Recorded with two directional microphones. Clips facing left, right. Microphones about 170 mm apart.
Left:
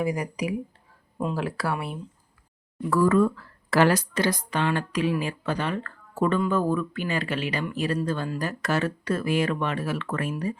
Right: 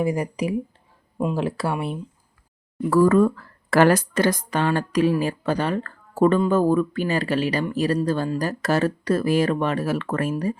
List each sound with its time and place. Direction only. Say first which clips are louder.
0.0 s speech: right 4 dB; 25° right (ahead or behind)
2.9 s speech: right 4 dB; 45° right (ahead or behind)